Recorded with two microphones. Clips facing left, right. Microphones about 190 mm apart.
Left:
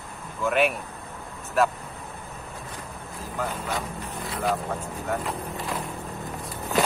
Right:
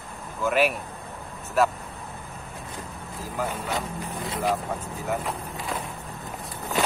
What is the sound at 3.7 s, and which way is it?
Vehicle, 25° right (ahead or behind).